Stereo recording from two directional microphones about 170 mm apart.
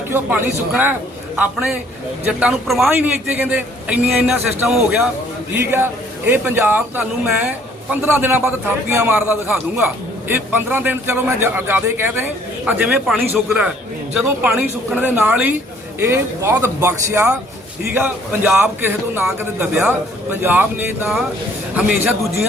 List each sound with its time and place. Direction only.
0.1 s a man's voice: 10° right (ahead or behind)
2.2 s a man's voice: 5° right (ahead or behind)